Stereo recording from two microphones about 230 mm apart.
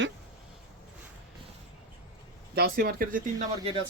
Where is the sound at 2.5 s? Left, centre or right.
Right.